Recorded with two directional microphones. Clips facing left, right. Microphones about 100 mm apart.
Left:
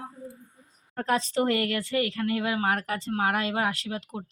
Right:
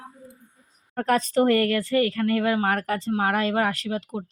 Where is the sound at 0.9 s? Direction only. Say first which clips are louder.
Right 5 dB; 50° right (ahead or behind).